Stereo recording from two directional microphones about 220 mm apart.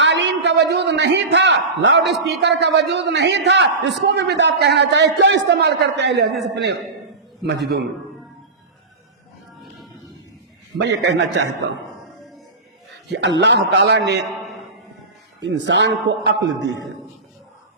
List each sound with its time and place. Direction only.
0.0 s a sound: 55° right (ahead or behind)
2.6 s a man's voice: 50° right (ahead or behind)
7.4 s a man's voice: 45° right (ahead or behind)
9.6 s a sound: centre (ahead or behind)
10.8 s a man's voice: 55° right (ahead or behind)
12.9 s a man's voice: 50° right (ahead or behind)
15.4 s a man's voice: 55° right (ahead or behind)